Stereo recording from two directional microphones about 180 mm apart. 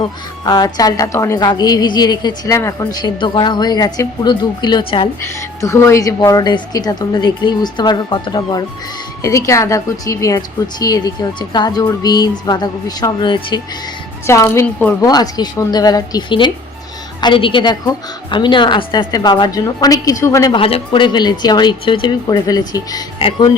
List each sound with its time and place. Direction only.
0.4 s a woman's voice: 20° left (ahead or behind)
5.2 s a woman's voice: 15° left (ahead or behind)
14.3 s a woman's voice: 15° left (ahead or behind)
15.0 s a woman's voice: 20° left (ahead or behind)
20.6 s a woman's voice: 30° left (ahead or behind)